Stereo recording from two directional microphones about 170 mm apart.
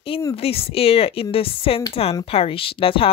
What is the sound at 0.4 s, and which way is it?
Speech, 35° left (ahead or behind).